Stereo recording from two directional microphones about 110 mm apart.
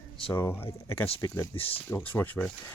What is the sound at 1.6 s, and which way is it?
Speech, 60° left (ahead or behind).